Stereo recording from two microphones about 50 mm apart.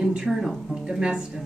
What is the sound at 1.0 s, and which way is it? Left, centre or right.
Speech, centre.